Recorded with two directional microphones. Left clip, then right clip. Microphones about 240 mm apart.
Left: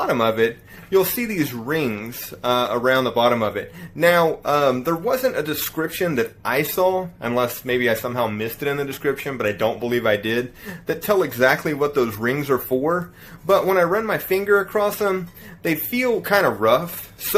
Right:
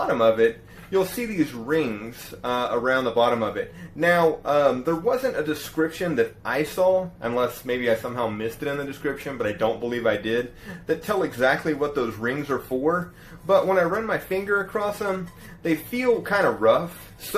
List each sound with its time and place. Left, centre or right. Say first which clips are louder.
0.1 s speech: right 3 dB; left